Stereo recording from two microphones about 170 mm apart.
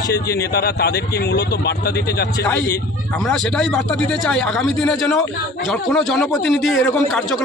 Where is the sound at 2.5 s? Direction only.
15° left (ahead or behind).